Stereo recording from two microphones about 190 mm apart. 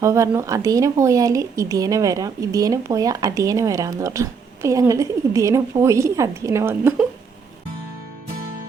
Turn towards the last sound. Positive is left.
turn(degrees=-10)  # may be behind; listen again after turning